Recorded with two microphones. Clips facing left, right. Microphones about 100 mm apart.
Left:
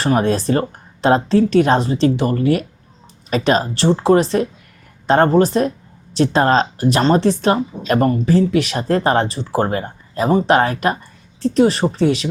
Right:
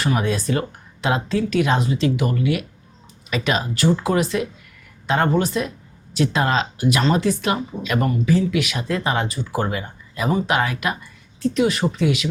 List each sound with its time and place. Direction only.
0.0 s speech: 35° left (ahead or behind)